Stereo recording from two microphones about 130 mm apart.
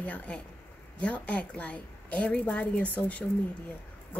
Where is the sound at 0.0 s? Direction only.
10° left (ahead or behind).